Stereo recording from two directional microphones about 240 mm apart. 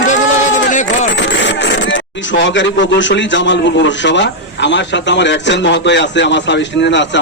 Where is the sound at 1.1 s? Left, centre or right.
Left.